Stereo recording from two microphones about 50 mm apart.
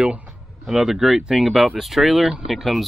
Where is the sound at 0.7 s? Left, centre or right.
Centre.